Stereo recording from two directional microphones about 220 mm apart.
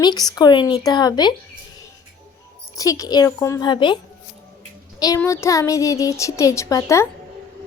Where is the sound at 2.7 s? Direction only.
15° left (ahead or behind).